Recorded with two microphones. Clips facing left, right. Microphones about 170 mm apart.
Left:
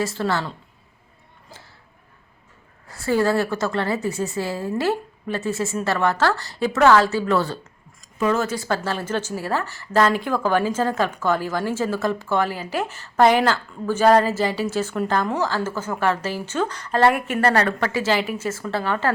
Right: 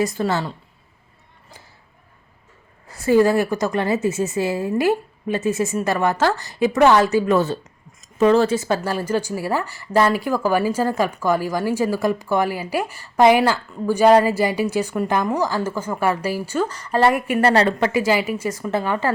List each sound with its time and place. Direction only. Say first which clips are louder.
0.0 s a woman's voice: right 2 dB; 15° right (ahead or behind)
2.9 s a woman's voice: right 4 dB; 20° right (ahead or behind)
8.2 s speech: right 6 dB; 30° right (ahead or behind)
8.6 s a woman's voice: right 3 dB; 15° right (ahead or behind)
17.5 s a woman's voice: right 3 dB; 25° right (ahead or behind)